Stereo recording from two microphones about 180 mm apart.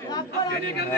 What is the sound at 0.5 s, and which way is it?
Speech, 60° left (ahead or behind).